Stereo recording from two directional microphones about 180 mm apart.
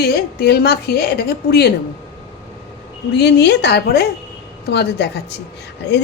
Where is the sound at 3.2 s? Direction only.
65° left (ahead or behind).